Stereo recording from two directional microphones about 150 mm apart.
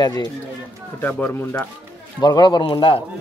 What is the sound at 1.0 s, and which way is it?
Speech, 10° left (ahead or behind).